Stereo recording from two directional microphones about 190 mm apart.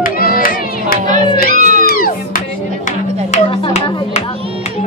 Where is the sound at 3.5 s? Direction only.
30° left (ahead or behind).